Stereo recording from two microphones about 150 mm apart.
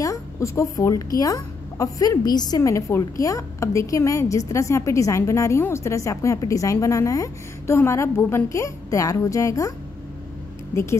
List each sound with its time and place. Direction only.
0.0 s a woman's voice: 20° left (ahead or behind)